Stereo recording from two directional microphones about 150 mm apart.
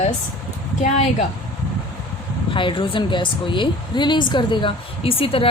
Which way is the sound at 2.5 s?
35° left (ahead or behind).